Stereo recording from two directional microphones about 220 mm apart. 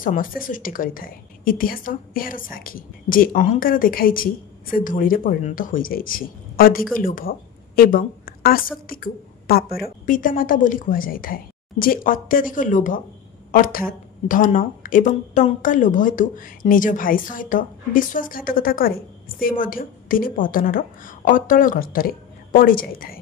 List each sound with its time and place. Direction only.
0.0 s a woman's voice: 40° left (ahead or behind)